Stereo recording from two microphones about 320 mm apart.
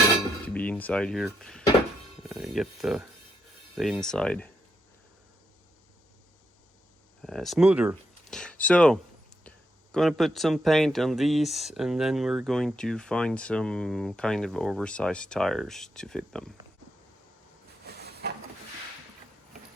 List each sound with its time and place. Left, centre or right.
0.4 s speech: centre
7.2 s speech: centre
17.8 s a sound: right